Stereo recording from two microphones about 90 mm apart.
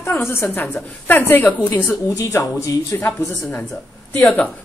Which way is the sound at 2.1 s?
35° left (ahead or behind).